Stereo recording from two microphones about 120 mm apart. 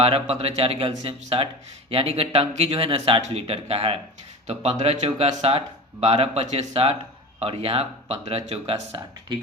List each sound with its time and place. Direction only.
0.0 s speech: 55° right (ahead or behind)